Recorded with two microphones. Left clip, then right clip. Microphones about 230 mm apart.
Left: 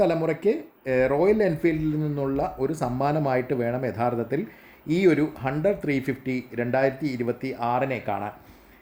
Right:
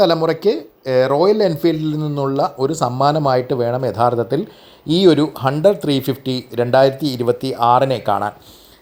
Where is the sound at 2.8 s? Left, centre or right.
Centre.